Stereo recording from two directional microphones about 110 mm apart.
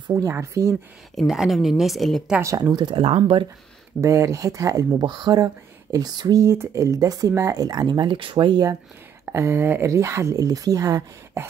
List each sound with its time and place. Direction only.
0.1 s speech: 30° right (ahead or behind)
1.1 s speech: 5° right (ahead or behind)
2.4 s speech: 30° right (ahead or behind); by 3.4 s 55° right (ahead or behind)
4.0 s speech: 30° right (ahead or behind); by 8.6 s 45° right (ahead or behind)
9.2 s speech: 25° right (ahead or behind)